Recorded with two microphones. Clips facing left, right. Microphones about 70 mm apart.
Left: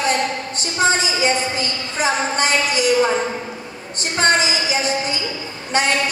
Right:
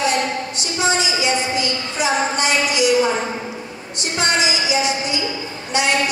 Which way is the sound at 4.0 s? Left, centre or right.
Left.